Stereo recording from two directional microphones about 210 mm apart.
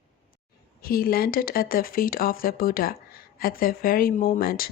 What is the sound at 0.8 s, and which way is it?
Speech, 45° left (ahead or behind).